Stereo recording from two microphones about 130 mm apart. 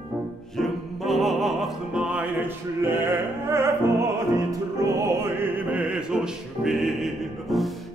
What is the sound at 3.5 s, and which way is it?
Opera, 20° right (ahead or behind).